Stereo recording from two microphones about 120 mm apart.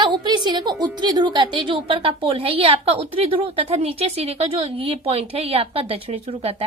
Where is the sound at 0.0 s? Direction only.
40° right (ahead or behind).